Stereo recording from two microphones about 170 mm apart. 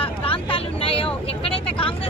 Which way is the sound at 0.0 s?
30° left (ahead or behind).